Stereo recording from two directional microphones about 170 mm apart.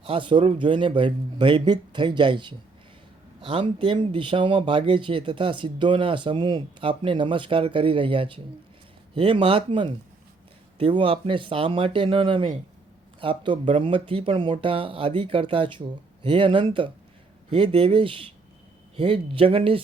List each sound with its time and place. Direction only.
0.0 s speech: 30° right (ahead or behind)